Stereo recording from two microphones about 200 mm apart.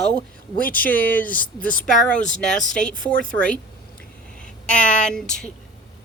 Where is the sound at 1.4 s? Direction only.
45° left (ahead or behind).